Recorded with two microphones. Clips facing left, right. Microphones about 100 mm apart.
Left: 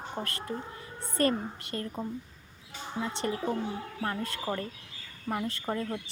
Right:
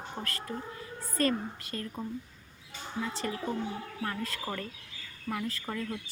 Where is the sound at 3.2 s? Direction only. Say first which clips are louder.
Left 5 dB; 35° left (ahead or behind).